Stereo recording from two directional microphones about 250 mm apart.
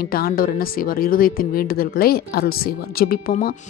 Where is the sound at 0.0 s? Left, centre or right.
Left.